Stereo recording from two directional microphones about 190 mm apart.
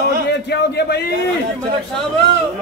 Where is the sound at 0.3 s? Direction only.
60° left (ahead or behind).